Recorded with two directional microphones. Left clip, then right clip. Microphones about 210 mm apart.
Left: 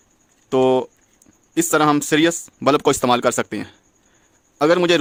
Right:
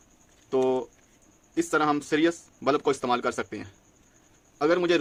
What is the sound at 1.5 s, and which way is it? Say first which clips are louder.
A man's voice: left 8 dB; 55° left (ahead or behind).